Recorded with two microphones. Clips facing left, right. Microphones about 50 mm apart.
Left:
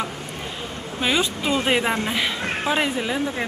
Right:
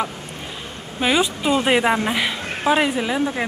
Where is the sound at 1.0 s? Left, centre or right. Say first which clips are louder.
Right 3 dB; centre.